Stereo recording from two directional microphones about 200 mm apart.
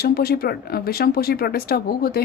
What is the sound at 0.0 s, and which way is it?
A woman's voice, 50° left (ahead or behind).